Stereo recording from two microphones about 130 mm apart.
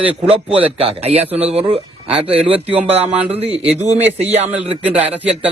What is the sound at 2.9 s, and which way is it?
Speech, 50° right (ahead or behind).